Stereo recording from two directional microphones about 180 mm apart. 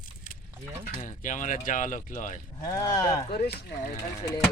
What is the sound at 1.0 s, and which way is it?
Speech, 45° left (ahead or behind).